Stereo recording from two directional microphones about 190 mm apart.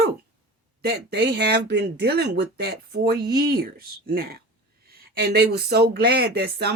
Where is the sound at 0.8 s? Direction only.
55° right (ahead or behind).